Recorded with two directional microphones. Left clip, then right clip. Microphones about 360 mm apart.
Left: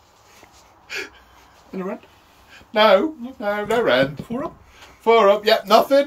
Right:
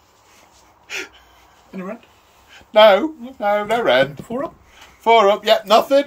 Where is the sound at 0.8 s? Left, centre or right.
Centre.